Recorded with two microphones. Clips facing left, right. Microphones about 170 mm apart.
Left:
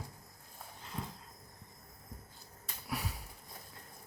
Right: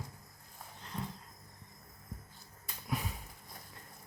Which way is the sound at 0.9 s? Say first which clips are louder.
Right 1 dB; 10° left (ahead or behind).